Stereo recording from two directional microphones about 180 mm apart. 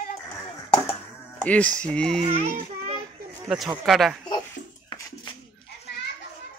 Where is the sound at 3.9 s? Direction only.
Centre (ahead or behind).